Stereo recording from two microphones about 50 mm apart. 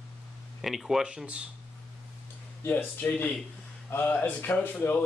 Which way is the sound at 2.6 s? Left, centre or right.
Left.